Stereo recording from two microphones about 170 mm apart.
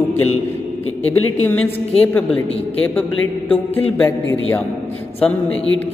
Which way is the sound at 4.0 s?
10° left (ahead or behind).